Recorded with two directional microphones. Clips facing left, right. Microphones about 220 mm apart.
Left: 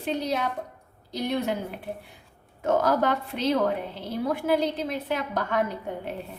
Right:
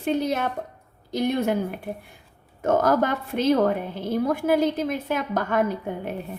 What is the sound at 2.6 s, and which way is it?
Speech, 45° right (ahead or behind).